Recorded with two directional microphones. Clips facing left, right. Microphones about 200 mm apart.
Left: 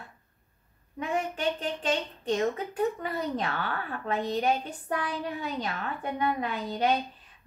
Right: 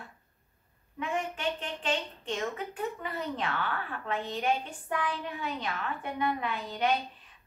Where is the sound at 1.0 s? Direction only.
40° left (ahead or behind).